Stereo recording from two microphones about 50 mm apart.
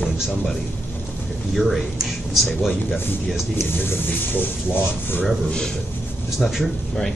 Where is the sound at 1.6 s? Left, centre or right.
Centre.